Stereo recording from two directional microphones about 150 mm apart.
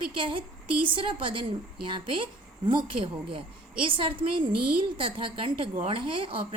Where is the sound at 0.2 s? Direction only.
35° right (ahead or behind).